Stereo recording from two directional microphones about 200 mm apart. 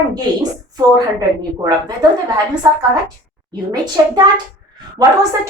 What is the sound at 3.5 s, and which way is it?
Speech, 20° right (ahead or behind).